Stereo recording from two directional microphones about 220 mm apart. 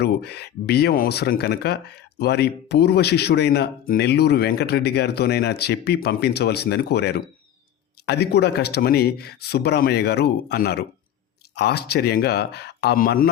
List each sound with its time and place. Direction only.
0.0 s speech: 45° left (ahead or behind)